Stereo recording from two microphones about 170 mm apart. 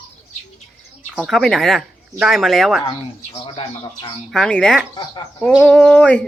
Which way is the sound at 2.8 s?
30° left (ahead or behind).